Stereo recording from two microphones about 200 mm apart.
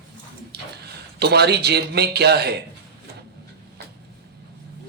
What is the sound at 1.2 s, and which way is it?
Speech, 55° right (ahead or behind).